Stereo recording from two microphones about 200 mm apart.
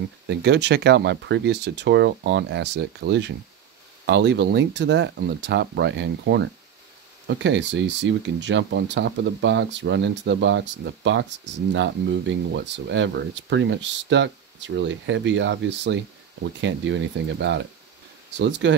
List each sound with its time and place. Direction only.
0.3 s speech: 60° right (ahead or behind)